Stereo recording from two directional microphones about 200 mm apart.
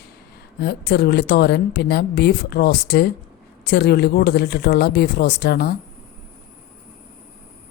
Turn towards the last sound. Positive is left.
turn(degrees=50)  # may be behind; listen again after turning